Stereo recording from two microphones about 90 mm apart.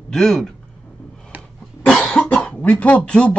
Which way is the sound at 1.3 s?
15° right (ahead or behind).